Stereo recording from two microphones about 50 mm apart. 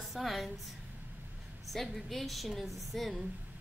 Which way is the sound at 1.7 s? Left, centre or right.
Centre.